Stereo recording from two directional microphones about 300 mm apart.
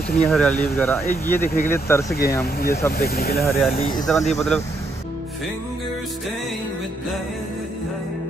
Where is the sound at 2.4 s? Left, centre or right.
Left.